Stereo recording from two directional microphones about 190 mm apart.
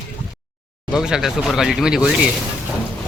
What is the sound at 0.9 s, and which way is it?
Speech, 5° right (ahead or behind).